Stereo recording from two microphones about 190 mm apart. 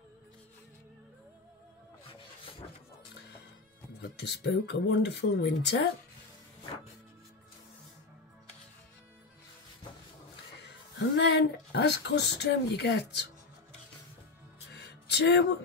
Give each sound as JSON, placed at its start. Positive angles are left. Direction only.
{"t": 4.0, "sound": "speech", "side_deg": 60}
{"t": 11.0, "sound": "speech", "side_deg": 65}
{"t": 14.7, "sound": "music", "side_deg": 60}